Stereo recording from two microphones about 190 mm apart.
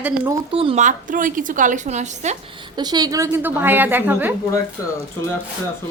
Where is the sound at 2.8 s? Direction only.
20° right (ahead or behind).